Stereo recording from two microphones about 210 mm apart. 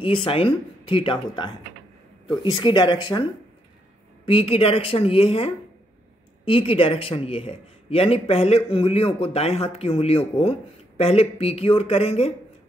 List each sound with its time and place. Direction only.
0.0 s a man's voice: 25° left (ahead or behind)
4.3 s a man's voice: 25° left (ahead or behind)